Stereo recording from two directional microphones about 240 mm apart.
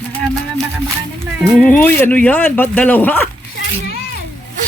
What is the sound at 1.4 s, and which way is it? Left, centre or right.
Speech, centre.